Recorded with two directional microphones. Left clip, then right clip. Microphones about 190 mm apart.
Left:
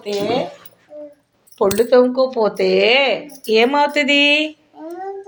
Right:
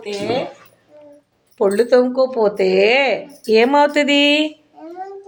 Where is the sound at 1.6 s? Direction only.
10° right (ahead or behind).